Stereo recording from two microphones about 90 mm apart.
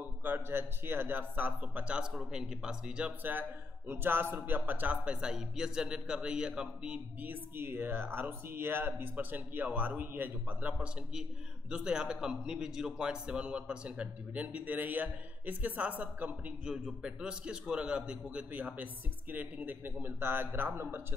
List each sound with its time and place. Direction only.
0.2 s speech: 25° right (ahead or behind)
3.3 s a man's voice: 20° right (ahead or behind)